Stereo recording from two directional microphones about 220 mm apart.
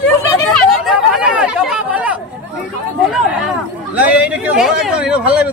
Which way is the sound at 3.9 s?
5° right (ahead or behind).